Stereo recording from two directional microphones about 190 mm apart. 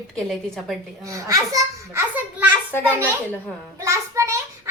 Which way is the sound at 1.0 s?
15° right (ahead or behind).